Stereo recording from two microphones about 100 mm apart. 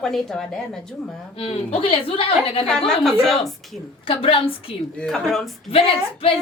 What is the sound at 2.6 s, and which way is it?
Speech, 5° left (ahead or behind).